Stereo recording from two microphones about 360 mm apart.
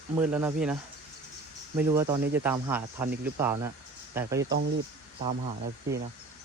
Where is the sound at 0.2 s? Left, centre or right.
Centre.